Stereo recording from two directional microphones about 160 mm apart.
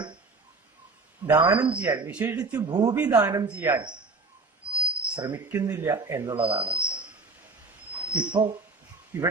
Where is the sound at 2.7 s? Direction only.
25° right (ahead or behind).